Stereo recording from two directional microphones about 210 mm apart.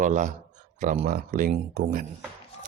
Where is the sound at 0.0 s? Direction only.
35° right (ahead or behind).